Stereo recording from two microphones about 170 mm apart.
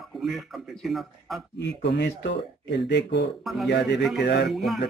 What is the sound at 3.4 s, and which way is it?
Speech, centre (ahead or behind).